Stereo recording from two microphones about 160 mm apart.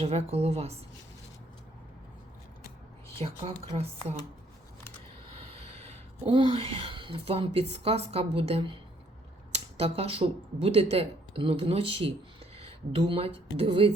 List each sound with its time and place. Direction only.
0.0 s speech: 40° right (ahead or behind)
3.2 s speech: 40° right (ahead or behind)
5.4 s speech: 40° right (ahead or behind)
12.5 s a sound: 40° right (ahead or behind)
13.1 s speech: 35° right (ahead or behind)